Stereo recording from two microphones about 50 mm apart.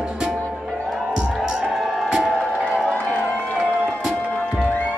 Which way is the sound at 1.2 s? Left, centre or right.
Centre.